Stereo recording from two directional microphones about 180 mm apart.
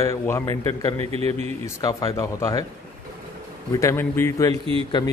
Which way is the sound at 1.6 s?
20° left (ahead or behind).